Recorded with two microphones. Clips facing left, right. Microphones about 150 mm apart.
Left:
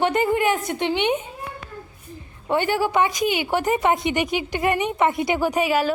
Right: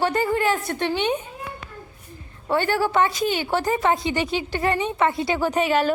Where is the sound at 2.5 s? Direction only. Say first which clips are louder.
Even; 15° left (ahead or behind).